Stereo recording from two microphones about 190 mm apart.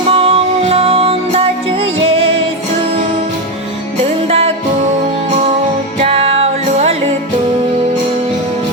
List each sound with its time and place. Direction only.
0.1 s music: 30° right (ahead or behind)
4.3 s music: 30° right (ahead or behind)
6.0 s music: 30° right (ahead or behind)